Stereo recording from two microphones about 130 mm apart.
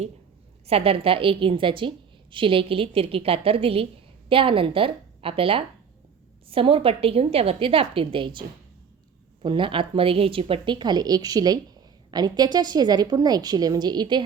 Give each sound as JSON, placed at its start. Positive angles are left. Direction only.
{"t": 0.7, "sound": "a woman's voice", "side_deg": -50}